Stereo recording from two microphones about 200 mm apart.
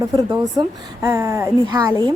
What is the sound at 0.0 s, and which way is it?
A woman's voice, 15° right (ahead or behind).